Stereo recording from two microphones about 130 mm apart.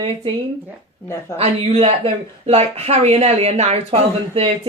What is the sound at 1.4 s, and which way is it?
Speech, 50° right (ahead or behind).